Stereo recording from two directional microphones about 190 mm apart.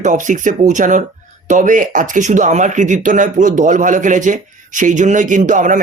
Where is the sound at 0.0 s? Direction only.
40° right (ahead or behind).